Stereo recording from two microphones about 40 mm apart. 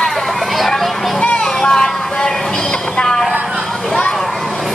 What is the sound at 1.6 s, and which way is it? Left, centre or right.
Vehicle, centre.